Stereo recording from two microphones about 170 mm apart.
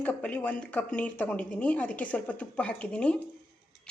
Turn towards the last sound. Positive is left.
turn(degrees=5)  # may be behind; listen again after turning